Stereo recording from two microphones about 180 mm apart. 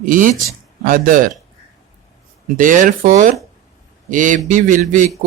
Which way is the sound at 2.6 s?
50° right (ahead or behind).